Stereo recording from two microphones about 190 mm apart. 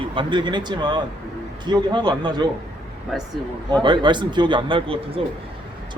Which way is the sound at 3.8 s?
25° right (ahead or behind).